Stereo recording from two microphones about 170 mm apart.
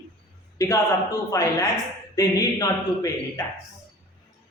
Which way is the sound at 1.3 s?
20° left (ahead or behind).